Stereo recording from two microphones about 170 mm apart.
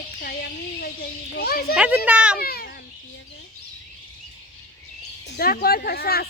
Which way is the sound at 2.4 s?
65° left (ahead or behind).